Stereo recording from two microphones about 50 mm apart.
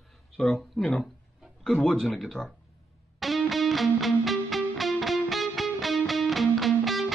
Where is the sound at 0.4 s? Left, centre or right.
Centre.